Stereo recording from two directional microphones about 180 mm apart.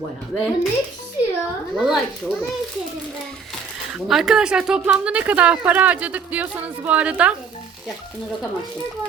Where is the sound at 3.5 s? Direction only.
Centre (ahead or behind).